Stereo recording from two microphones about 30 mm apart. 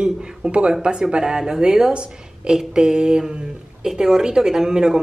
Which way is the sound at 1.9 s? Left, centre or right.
Right.